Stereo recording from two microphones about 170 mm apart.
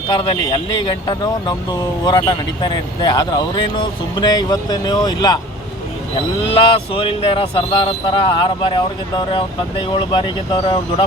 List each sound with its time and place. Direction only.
0.2 s speech: 25° left (ahead or behind)
6.5 s speech: 30° left (ahead or behind)